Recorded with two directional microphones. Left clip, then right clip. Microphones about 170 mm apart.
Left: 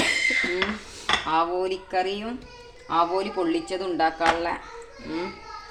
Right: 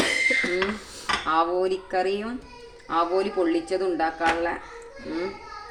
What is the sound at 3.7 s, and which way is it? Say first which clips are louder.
Speech: even; 25° left (ahead or behind).